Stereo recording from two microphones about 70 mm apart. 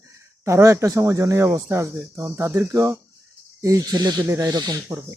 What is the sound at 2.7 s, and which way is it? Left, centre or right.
Speech, right.